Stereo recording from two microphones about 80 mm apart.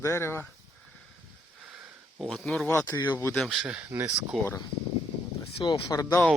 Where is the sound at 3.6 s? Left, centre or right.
Centre.